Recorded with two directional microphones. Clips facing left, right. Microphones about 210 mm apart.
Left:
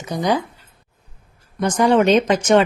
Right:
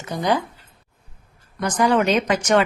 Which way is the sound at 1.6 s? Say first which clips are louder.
Left 4 dB; 30° left (ahead or behind).